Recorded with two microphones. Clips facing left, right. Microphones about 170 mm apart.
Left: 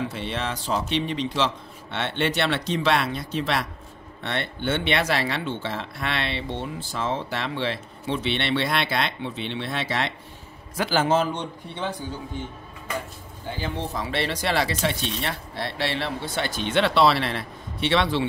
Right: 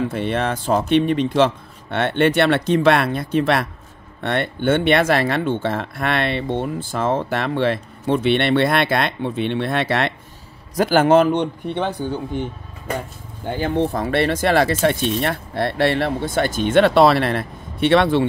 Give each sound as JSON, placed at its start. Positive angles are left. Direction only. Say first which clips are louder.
{"t": 0.1, "sound": "speech", "louder": "right 8 dB", "side_deg": -55}
{"t": 13.5, "sound": "speech", "louder": "right 10 dB", "side_deg": -55}